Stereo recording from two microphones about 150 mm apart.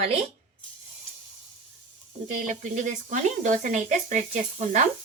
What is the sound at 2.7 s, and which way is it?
Speech, 60° right (ahead or behind).